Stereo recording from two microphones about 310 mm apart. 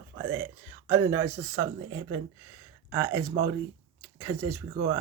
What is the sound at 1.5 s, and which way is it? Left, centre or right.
Speech, right.